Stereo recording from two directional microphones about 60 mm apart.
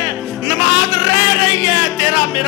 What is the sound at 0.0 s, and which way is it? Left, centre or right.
Music, centre.